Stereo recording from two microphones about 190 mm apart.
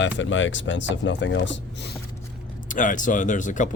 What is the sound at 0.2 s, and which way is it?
Speech, 85° left.